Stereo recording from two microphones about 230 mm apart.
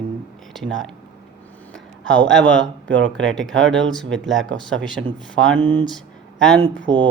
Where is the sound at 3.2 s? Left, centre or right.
Centre.